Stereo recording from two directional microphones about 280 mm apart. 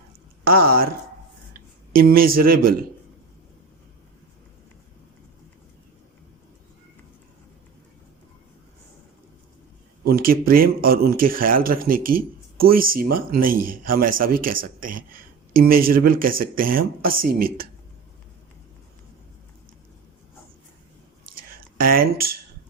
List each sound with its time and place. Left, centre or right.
0.5 s speech: right
10.1 s speech: right
21.2 s whispering: right